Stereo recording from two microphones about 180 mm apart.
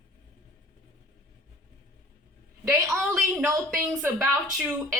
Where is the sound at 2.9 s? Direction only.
10° right (ahead or behind).